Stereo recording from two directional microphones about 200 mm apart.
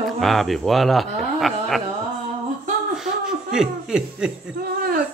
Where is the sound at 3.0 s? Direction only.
5° right (ahead or behind).